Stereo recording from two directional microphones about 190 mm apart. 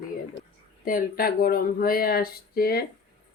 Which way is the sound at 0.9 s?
50° left (ahead or behind).